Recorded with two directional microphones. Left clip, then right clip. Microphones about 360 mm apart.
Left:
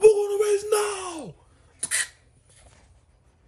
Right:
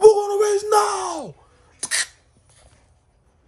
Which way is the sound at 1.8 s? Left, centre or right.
Right.